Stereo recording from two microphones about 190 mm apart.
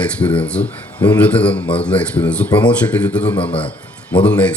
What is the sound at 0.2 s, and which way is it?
A man's voice, 5° left (ahead or behind).